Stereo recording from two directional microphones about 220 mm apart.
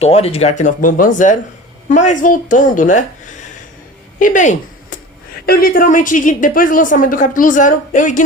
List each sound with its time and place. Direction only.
0.0 s a woman's voice: 25° left (ahead or behind)